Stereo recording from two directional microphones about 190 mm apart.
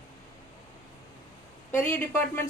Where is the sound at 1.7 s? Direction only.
10° left (ahead or behind).